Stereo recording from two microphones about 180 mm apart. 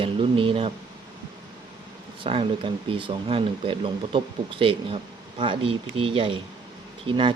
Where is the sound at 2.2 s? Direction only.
30° right (ahead or behind).